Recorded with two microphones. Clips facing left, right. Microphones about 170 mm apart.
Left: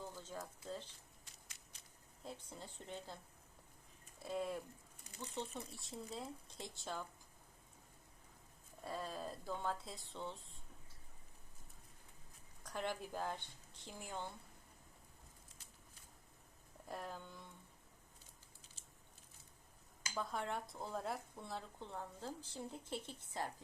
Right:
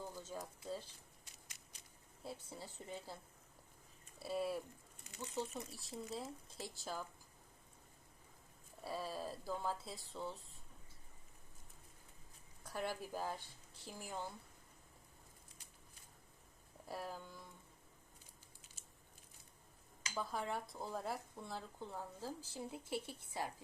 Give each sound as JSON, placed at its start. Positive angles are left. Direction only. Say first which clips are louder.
{"t": 0.0, "sound": "speech", "louder": "right 1 dB", "side_deg": -10}
{"t": 2.2, "sound": "speech", "louder": "right 2 dB", "side_deg": -5}
{"t": 4.2, "sound": "speech", "louder": "right 2 dB", "side_deg": -5}
{"t": 8.8, "sound": "speech", "louder": "right 1 dB", "side_deg": -5}
{"t": 12.6, "sound": "speech", "louder": "even", "side_deg": -10}
{"t": 16.9, "sound": "speech", "louder": "right 1 dB", "side_deg": -5}
{"t": 20.1, "sound": "speech", "louder": "even", "side_deg": 0}